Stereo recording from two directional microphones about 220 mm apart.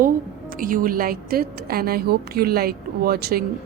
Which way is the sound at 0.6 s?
40° right (ahead or behind).